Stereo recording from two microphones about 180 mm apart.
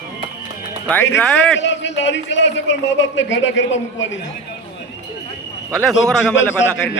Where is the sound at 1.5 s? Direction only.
85° left.